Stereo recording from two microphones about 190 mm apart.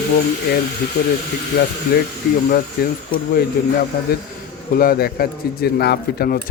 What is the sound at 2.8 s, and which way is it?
Speech, 55° left (ahead or behind).